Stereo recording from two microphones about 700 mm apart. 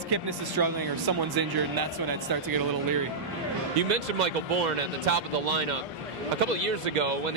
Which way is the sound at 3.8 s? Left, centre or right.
Right.